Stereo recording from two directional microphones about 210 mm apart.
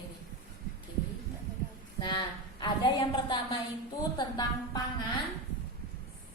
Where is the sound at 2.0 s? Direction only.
20° left (ahead or behind).